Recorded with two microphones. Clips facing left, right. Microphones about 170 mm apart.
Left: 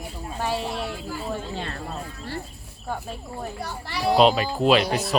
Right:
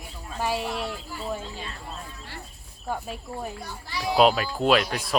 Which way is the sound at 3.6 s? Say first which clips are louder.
Left 5 dB; 70° left (ahead or behind).